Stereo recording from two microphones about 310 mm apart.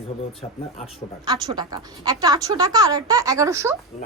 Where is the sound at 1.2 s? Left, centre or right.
Centre.